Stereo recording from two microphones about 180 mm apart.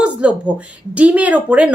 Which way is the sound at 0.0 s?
5° right (ahead or behind).